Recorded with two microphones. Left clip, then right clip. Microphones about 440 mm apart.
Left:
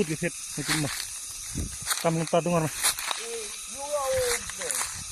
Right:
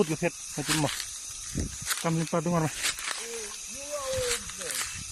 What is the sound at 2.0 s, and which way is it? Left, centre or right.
Speech, centre.